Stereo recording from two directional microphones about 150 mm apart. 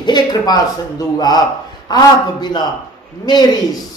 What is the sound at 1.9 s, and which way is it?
Music, 30° left (ahead or behind).